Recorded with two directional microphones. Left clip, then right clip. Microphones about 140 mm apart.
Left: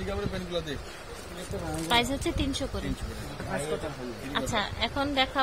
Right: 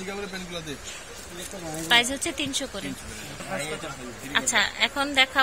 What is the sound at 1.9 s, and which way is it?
Speech, 15° left (ahead or behind).